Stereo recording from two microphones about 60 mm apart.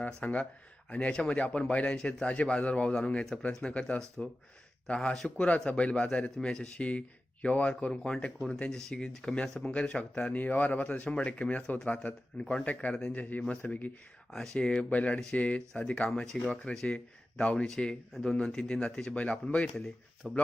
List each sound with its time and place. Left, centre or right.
0.0 s speech: left
5.1 s speech: centre
5.5 s speech: centre
14.3 s speech: centre; by 19.7 s left
19.7 s speech: centre